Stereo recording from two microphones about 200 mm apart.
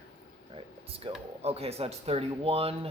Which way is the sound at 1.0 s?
25° right (ahead or behind).